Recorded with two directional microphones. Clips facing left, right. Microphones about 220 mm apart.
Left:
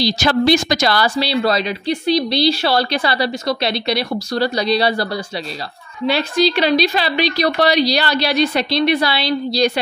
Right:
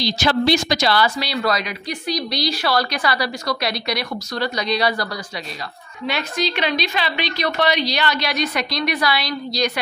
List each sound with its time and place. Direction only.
0.0 s a woman's voice: 45° left (ahead or behind)
1.0 s a woman's voice: 30° left (ahead or behind)